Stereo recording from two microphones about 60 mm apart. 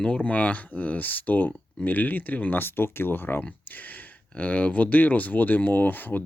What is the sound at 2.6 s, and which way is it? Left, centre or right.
Speech, left.